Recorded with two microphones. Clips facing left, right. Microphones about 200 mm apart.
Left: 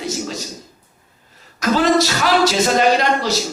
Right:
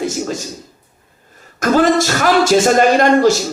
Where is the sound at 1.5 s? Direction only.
50° right (ahead or behind).